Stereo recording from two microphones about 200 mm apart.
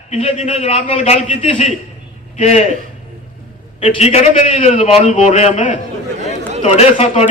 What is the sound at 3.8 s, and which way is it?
A man's voice, 30° left (ahead or behind).